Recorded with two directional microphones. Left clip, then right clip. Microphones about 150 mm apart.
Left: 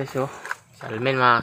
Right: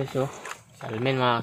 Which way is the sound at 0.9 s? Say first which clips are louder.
Left 5 dB; 50° right (ahead or behind).